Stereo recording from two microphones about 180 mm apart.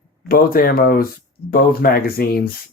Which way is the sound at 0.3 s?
55° left (ahead or behind).